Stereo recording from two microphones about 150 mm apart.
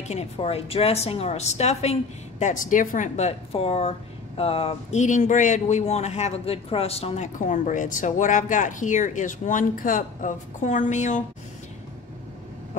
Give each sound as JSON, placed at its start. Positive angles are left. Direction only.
{"t": 0.1, "sound": "a woman's voice", "side_deg": 45}
{"t": 7.3, "sound": "speech", "side_deg": 60}